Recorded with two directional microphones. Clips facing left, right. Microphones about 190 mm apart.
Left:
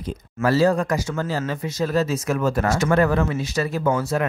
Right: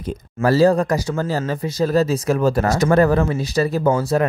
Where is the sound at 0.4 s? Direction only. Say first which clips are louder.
Right 4 dB; 35° right (ahead or behind).